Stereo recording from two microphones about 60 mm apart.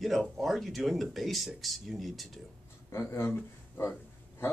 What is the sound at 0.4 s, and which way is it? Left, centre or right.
Speech, centre.